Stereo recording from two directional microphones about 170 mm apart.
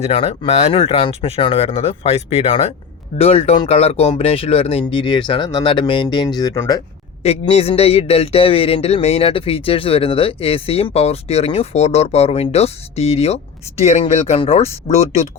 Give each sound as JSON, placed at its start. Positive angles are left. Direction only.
{"t": 0.0, "sound": "speech", "side_deg": 35}
{"t": 7.2, "sound": "speech", "side_deg": 35}